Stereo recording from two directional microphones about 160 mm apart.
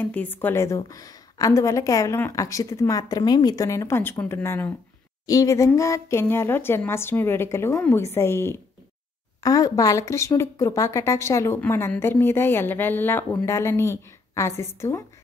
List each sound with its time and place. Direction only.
0.0 s a woman's voice: 10° left (ahead or behind)